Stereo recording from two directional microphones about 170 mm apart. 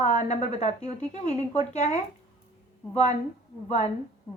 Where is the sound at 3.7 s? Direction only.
40° left (ahead or behind).